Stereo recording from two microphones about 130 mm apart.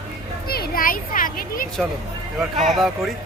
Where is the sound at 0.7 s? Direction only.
90° left.